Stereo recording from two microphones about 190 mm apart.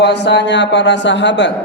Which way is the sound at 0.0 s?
65° left (ahead or behind).